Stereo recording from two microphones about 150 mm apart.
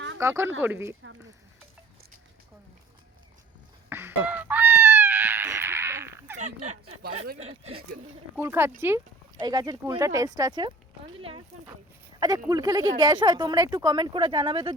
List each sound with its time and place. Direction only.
0.2 s speech: 15° right (ahead or behind)
3.8 s a sound: 15° right (ahead or behind)
6.4 s a sound: 50° right (ahead or behind)
7.3 s speech: 45° right (ahead or behind)
8.4 s speech: 15° right (ahead or behind)
9.4 s speech: 25° right (ahead or behind)
11.2 s speech: 40° right (ahead or behind)
12.5 s speech: 25° right (ahead or behind)